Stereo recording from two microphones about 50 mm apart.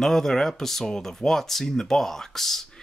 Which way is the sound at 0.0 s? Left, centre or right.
Centre.